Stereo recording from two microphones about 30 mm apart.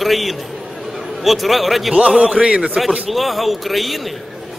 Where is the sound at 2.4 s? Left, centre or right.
Right.